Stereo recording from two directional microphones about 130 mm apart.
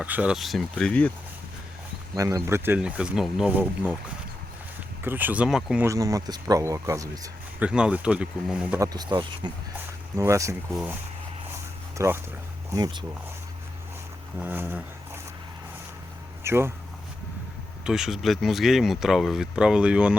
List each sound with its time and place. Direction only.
0.0 s speech: 10° right (ahead or behind); by 1.1 s 10° left (ahead or behind)
2.1 s speech: 25° right (ahead or behind)
5.0 s speech: 15° right (ahead or behind)
5.8 s speech: 25° right (ahead or behind)
7.6 s speech: 10° right (ahead or behind)
8.8 s speech: 30° right (ahead or behind)
10.2 s speech: 25° right (ahead or behind)
11.9 s speech: 20° right (ahead or behind)
12.7 s speech: 35° right (ahead or behind)
14.3 s dog: 15° right (ahead or behind)
16.4 s speech: 20° right (ahead or behind)
17.8 s speech: 5° right (ahead or behind)